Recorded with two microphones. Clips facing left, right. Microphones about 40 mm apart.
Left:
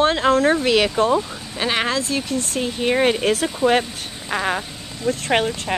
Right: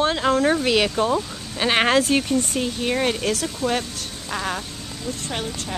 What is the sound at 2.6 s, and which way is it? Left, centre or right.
Speech, centre.